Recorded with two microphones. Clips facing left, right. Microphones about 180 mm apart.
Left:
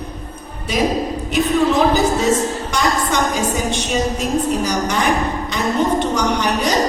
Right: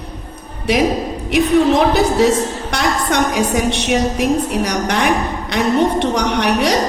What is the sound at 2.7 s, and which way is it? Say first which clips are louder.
A woman's voice: right 2 dB; 70° right (ahead or behind).